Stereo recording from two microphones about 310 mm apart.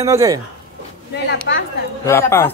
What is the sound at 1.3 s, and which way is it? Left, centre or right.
Speech, left.